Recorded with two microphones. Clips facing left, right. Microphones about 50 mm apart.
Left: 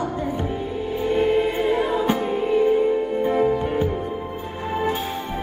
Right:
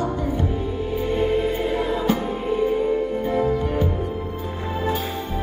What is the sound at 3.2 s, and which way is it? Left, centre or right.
Music, left.